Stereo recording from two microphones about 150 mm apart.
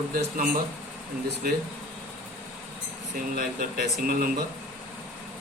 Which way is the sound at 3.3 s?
80° right.